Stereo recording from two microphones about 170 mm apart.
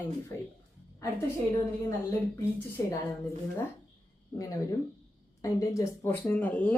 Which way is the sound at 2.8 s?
20° left (ahead or behind).